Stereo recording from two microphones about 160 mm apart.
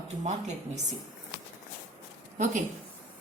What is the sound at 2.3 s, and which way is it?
Speech, 55° right (ahead or behind).